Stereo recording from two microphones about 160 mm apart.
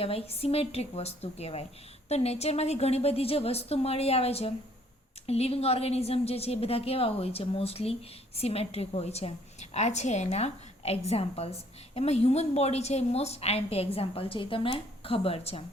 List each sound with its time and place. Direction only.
0.0 s a woman's voice: 35° left (ahead or behind)